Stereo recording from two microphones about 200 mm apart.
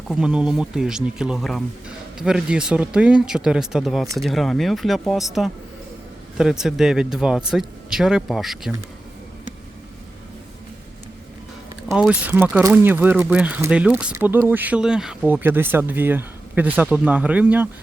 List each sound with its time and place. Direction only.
0.1 s speech: 5° right (ahead or behind)
11.9 s speech: 5° right (ahead or behind)